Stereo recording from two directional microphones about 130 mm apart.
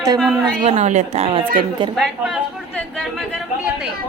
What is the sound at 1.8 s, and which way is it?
Speech, 35° right (ahead or behind).